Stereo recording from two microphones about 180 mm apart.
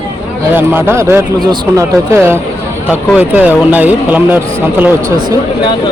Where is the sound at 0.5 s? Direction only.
10° right (ahead or behind).